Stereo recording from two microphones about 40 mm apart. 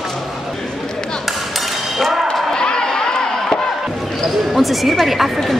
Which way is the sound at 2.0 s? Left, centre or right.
Centre.